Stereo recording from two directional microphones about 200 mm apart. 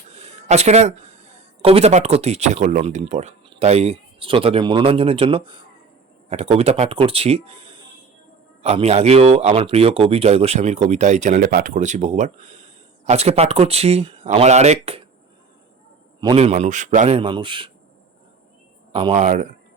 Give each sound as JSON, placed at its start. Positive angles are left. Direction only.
{"t": 0.1, "sound": "speech", "side_deg": -35}
{"t": 16.2, "sound": "speech", "side_deg": -30}
{"t": 17.2, "sound": "speech", "side_deg": -25}
{"t": 19.1, "sound": "speech", "side_deg": -40}